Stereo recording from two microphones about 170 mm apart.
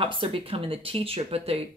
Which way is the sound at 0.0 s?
30° right (ahead or behind).